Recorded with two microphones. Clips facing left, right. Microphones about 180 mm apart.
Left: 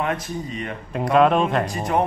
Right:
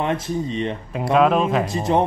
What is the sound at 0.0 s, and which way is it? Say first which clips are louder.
Speech: right 3 dB; 25° right (ahead or behind).